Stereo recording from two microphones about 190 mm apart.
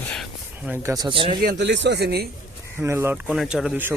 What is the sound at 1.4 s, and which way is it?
Speech, 60° right (ahead or behind).